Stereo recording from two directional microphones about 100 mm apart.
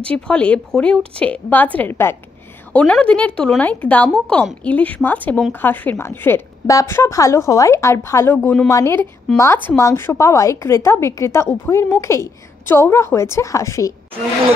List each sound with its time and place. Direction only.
0.0 s a woman's voice: 10° left (ahead or behind)
2.7 s a woman's voice: 10° left (ahead or behind); by 8.9 s 35° left (ahead or behind)
9.4 s a woman's voice: 25° left (ahead or behind)